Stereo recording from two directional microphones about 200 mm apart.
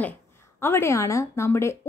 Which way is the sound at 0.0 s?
10° left (ahead or behind).